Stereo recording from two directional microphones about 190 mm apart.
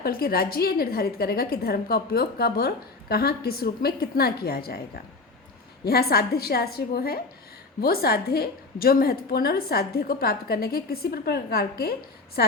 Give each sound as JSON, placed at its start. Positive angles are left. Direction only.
{"t": 0.0, "sound": "a woman's voice", "side_deg": 55}
{"t": 5.8, "sound": "a woman's voice", "side_deg": 55}